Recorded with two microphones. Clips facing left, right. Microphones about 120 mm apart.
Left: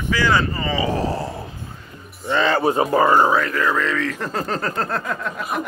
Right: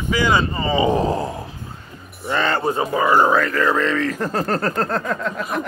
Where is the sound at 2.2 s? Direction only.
Centre (ahead or behind).